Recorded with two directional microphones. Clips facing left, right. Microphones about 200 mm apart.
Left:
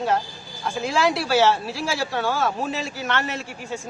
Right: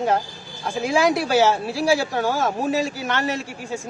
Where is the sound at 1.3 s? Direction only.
15° right (ahead or behind).